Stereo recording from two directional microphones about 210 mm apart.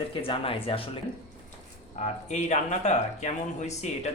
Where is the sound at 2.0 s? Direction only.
35° left (ahead or behind).